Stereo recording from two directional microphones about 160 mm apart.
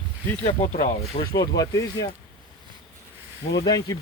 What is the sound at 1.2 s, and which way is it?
Speech, 20° left (ahead or behind).